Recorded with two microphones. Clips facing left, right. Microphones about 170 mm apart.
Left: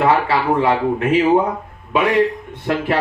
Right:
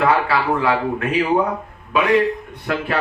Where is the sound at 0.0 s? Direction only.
25° left (ahead or behind).